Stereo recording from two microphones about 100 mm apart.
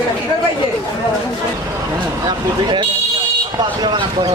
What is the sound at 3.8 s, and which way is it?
Speech, 45° right (ahead or behind).